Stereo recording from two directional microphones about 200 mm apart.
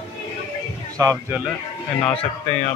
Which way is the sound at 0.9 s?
15° right (ahead or behind).